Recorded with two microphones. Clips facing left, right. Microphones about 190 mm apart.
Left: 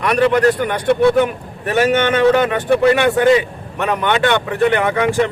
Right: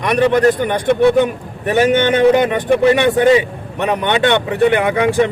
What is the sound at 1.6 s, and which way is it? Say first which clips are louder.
A man's voice: right 2 dB; 20° right (ahead or behind).